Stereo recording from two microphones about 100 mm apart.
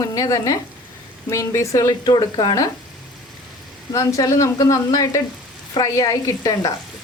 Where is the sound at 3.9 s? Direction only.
35° left (ahead or behind).